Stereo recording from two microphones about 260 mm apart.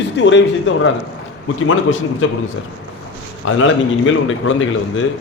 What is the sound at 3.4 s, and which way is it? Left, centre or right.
A man's voice, left.